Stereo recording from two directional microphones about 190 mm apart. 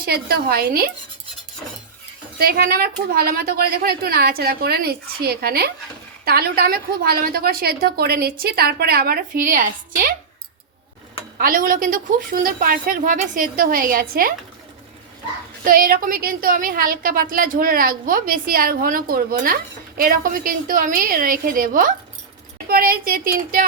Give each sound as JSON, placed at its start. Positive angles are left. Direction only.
{"t": 0.0, "sound": "a woman's voice", "side_deg": -55}
{"t": 2.4, "sound": "a woman's voice", "side_deg": -50}
{"t": 11.3, "sound": "a woman's voice", "side_deg": -45}
{"t": 15.6, "sound": "a woman's voice", "side_deg": -50}